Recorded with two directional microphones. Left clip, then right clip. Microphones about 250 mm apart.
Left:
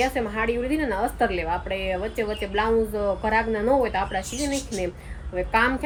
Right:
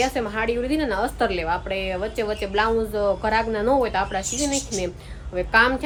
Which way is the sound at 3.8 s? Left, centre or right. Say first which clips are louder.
Right 2 dB; centre.